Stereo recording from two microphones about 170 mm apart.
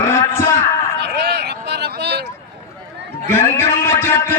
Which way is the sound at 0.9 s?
80° right.